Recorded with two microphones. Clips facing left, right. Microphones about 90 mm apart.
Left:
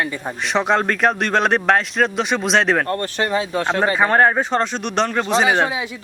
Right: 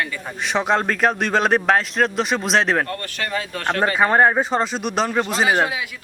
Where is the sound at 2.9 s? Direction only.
30° left (ahead or behind).